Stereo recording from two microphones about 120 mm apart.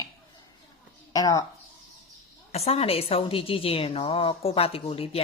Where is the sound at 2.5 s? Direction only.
60° left (ahead or behind).